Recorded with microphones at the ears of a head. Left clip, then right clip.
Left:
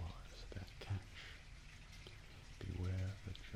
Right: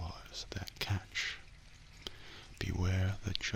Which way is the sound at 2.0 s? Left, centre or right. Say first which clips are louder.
Right 11 dB; right.